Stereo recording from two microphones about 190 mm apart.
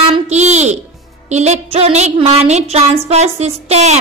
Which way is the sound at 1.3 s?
35° right (ahead or behind).